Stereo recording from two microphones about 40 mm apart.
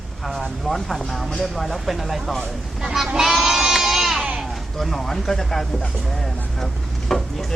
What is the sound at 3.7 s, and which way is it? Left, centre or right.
Goat, centre.